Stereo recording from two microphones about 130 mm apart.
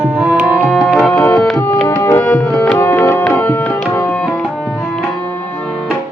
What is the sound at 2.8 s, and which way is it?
Music, 20° left (ahead or behind).